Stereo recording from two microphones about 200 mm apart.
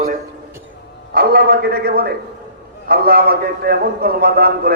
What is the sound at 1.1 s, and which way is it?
A man's voice, 50° right (ahead or behind).